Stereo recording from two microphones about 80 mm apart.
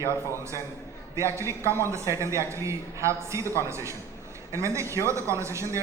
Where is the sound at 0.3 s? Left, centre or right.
Right.